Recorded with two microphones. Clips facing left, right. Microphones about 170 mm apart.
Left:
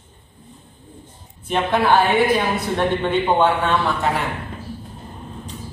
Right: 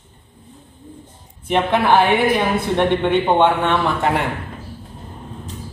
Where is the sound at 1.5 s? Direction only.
20° right (ahead or behind).